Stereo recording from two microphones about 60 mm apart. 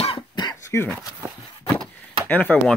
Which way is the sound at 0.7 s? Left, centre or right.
Left.